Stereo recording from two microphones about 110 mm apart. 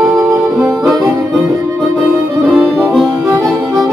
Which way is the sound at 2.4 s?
5° right (ahead or behind).